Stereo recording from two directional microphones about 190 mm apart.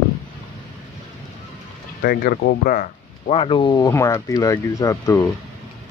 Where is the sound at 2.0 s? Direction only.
50° left (ahead or behind).